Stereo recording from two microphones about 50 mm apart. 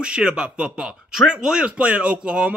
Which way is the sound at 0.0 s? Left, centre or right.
Right.